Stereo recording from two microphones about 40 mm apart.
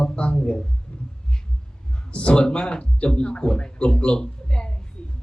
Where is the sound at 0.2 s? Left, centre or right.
Left.